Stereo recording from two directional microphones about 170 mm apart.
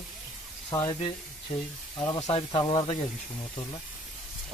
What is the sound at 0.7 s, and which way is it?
Speech, 25° left (ahead or behind).